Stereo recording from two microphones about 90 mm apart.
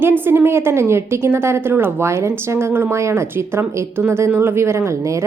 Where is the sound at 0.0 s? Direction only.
25° right (ahead or behind).